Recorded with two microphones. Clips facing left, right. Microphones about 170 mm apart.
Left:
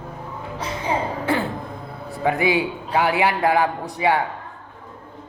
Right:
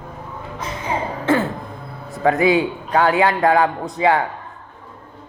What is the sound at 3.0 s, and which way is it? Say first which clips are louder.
Speech: right 3 dB; 15° left (ahead or behind).